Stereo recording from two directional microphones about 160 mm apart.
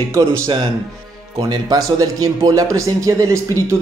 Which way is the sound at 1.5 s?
25° right (ahead or behind).